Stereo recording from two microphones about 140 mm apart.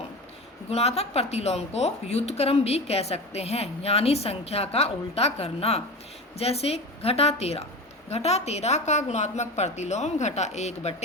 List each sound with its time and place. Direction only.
0.7 s a woman's voice: 50° left (ahead or behind)